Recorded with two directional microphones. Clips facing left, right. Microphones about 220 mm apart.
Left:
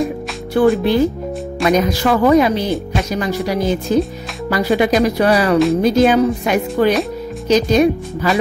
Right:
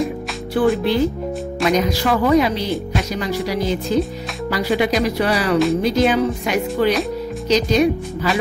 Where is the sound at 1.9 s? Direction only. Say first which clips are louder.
Left 3 dB; 50° left (ahead or behind).